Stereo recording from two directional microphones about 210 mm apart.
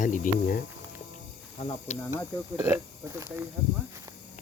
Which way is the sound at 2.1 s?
10° right (ahead or behind).